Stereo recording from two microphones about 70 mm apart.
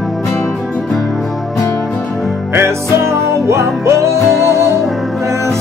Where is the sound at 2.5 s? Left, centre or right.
Right.